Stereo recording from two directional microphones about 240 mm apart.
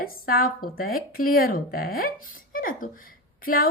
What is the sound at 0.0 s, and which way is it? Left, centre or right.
A woman's voice, left.